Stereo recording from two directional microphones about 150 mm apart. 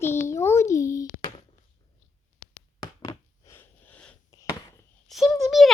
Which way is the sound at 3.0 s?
15° left (ahead or behind).